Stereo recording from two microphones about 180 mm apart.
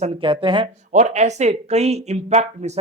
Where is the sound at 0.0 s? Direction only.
30° right (ahead or behind).